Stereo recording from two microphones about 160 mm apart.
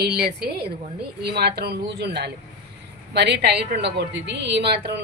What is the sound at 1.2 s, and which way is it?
A woman's voice, 90° right.